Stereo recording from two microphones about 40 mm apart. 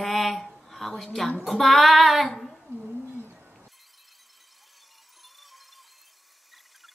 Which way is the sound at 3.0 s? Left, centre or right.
Right.